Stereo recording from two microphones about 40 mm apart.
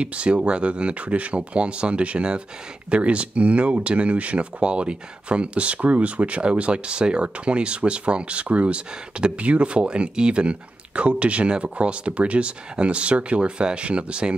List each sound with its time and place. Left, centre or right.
0.0 s speech: right